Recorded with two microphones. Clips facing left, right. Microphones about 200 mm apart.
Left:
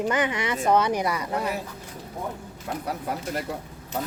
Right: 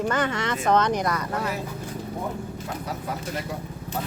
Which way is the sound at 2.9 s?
60° left (ahead or behind).